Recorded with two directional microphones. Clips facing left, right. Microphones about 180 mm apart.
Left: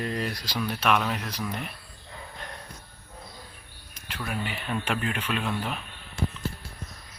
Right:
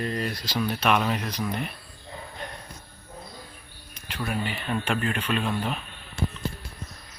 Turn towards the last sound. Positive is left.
turn(degrees=-25)  # may be behind; listen again after turning